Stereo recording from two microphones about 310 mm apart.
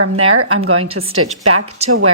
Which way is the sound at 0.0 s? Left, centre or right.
Right.